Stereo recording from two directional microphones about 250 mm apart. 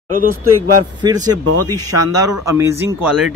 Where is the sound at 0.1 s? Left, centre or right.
Right.